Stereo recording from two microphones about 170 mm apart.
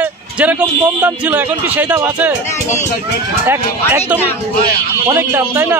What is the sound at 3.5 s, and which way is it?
A man's voice, 10° right (ahead or behind).